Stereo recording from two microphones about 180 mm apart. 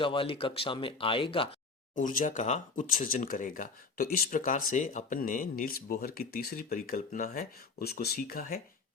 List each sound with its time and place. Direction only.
0.0 s speech: 30° left (ahead or behind)
2.0 s speech: 45° left (ahead or behind)